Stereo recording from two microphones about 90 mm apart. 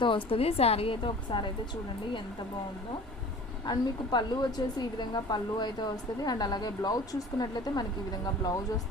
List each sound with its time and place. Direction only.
0.0 s a woman's voice: 75° left (ahead or behind)
3.7 s a woman's voice: 55° left (ahead or behind)